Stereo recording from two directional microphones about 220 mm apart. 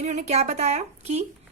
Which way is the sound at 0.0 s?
30° right (ahead or behind).